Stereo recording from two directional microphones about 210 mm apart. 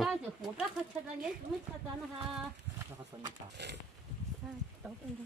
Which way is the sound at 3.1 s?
15° right (ahead or behind).